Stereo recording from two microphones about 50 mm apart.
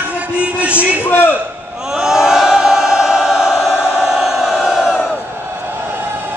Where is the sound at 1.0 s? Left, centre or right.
Left.